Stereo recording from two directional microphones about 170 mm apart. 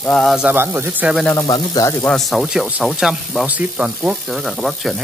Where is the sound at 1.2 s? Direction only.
15° left (ahead or behind).